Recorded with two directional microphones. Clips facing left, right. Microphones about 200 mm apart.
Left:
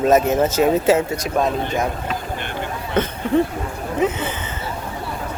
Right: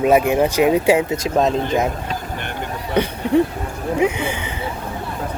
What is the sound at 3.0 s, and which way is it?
Speech, 15° right (ahead or behind).